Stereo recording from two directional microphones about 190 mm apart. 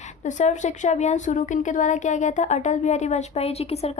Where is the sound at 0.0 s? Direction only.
40° left (ahead or behind).